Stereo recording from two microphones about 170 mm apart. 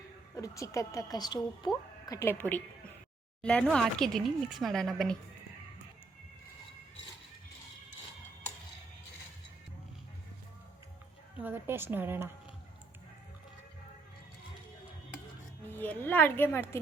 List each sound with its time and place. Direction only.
0.3 s a woman's voice: 20° left (ahead or behind); by 5.1 s centre (ahead or behind)
11.3 s a woman's voice: 10° right (ahead or behind)
15.8 s a woman's voice: 10° left (ahead or behind)